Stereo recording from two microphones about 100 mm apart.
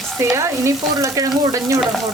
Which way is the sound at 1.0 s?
35° right (ahead or behind).